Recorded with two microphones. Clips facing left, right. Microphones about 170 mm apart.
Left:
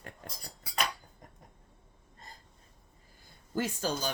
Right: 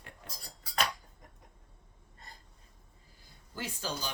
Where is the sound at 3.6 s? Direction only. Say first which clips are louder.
Left 6 dB; 45° left (ahead or behind).